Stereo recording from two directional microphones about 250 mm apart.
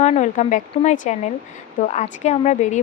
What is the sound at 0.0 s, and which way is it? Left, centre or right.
Speech, left.